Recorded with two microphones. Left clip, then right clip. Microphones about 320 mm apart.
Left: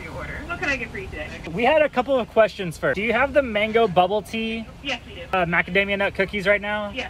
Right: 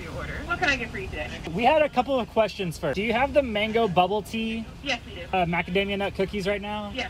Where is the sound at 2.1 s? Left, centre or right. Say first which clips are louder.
Left 5 dB; left.